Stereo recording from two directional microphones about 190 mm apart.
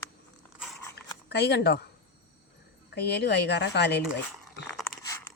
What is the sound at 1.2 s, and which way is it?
Speech, 60° left (ahead or behind).